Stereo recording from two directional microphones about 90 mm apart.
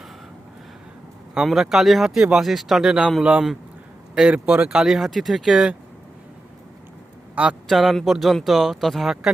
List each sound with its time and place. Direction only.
1.3 s a man's voice: 5° right (ahead or behind)
4.4 s speech: 20° right (ahead or behind)
4.7 s speech: 5° right (ahead or behind)
7.4 s speech: 20° right (ahead or behind)
7.7 s speech: centre (ahead or behind)